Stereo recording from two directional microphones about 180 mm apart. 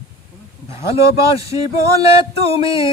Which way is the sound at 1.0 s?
30° left (ahead or behind).